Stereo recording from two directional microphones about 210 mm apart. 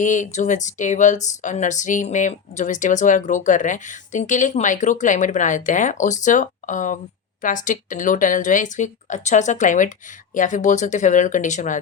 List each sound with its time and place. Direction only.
0.0 s speech: 35° left (ahead or behind)